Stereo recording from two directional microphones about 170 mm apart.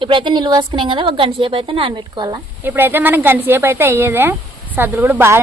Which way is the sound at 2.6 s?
10° right (ahead or behind).